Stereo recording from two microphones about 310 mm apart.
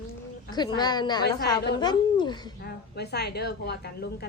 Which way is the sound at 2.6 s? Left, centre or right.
Left.